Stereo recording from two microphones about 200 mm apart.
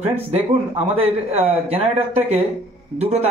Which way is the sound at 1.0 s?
30° right (ahead or behind).